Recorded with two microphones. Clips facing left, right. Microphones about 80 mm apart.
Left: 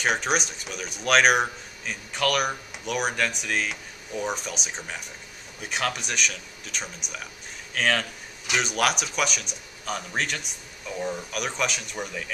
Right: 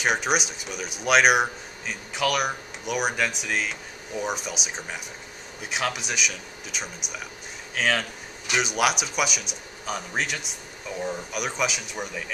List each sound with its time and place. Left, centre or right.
0.0 s speech: centre